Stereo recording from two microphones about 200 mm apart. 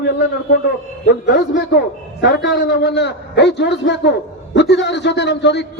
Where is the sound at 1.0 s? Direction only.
60° left (ahead or behind).